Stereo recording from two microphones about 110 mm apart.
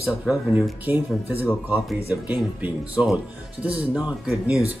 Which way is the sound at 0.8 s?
20° right (ahead or behind).